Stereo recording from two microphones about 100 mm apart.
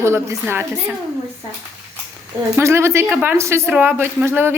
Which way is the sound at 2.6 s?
25° right (ahead or behind).